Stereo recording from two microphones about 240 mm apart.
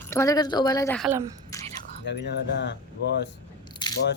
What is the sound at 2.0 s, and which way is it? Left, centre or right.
Speech, left.